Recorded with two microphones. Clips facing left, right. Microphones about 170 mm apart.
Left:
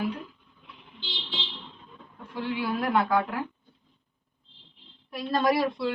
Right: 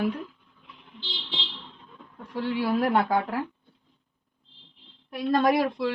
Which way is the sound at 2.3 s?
35° right (ahead or behind).